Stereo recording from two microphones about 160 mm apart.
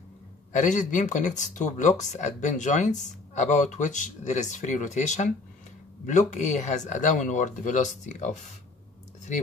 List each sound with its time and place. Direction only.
0.5 s speech: 50° left (ahead or behind)